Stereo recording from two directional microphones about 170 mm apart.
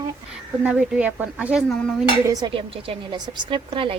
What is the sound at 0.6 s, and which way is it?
Speech, 5° right (ahead or behind).